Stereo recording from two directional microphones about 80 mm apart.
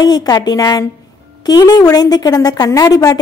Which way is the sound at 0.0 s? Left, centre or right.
Left.